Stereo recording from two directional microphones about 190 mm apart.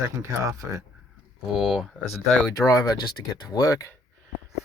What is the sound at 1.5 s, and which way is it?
Speech, centre (ahead or behind).